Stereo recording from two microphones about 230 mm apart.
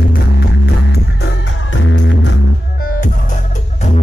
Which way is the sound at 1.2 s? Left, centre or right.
Left.